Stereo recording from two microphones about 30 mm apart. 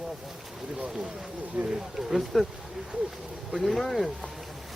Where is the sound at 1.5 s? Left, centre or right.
Right.